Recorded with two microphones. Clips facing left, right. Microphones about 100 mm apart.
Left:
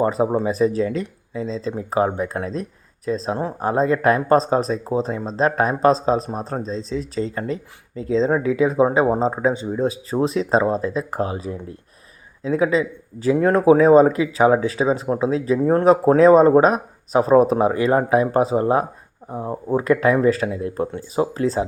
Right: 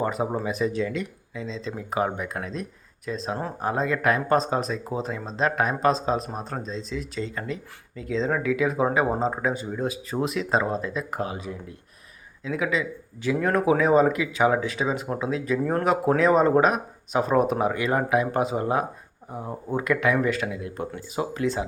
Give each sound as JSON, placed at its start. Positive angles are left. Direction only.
{"t": 0.0, "sound": "speech", "side_deg": 30}